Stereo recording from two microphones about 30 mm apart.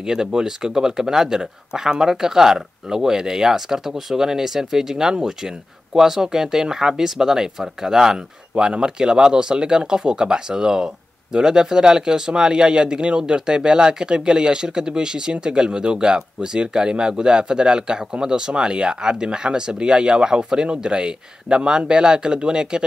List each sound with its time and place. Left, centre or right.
0.0 s speech: right